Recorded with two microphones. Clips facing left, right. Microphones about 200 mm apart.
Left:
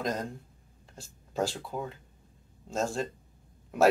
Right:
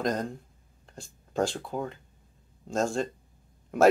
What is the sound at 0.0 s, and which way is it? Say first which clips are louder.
Speech: right 3 dB; 5° left (ahead or behind).